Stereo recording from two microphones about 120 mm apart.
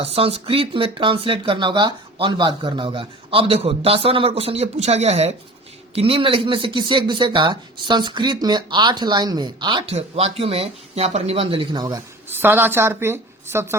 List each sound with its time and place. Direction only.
0.0 s speech: 55° right (ahead or behind)
5.9 s speech: 50° right (ahead or behind)
9.8 s speech: 55° right (ahead or behind); by 11.9 s 35° right (ahead or behind)
12.3 s a woman's voice: 20° right (ahead or behind)